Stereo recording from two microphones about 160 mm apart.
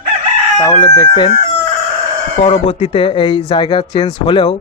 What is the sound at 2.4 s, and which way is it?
Speech, 35° left (ahead or behind).